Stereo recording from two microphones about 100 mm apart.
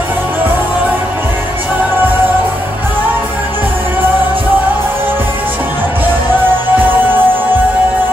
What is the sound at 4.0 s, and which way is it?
Music, 20° right (ahead or behind).